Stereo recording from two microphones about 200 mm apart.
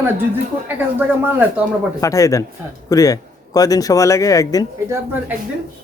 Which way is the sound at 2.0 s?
15° left (ahead or behind).